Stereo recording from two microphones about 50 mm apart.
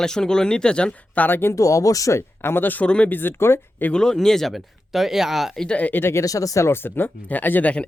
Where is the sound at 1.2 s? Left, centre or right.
Left.